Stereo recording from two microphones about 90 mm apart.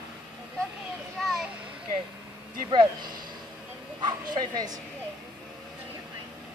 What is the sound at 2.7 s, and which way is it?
Speech, 55° right (ahead or behind).